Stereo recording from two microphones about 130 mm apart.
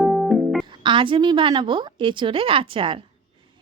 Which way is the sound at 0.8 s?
40° right (ahead or behind).